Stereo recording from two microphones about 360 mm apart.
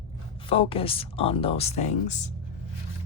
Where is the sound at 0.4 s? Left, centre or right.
Centre.